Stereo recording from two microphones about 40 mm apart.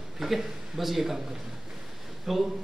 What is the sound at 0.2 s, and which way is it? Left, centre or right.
Speech, centre.